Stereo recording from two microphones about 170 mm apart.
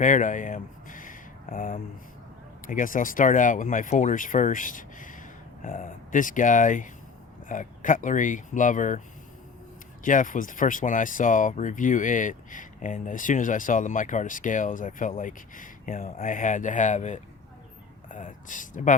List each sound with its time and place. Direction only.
0.0 s speech: 50° left (ahead or behind)
10.0 s speech: 50° left (ahead or behind)